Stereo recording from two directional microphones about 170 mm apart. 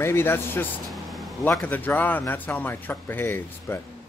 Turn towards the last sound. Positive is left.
turn(degrees=15)  # may be behind; listen again after turning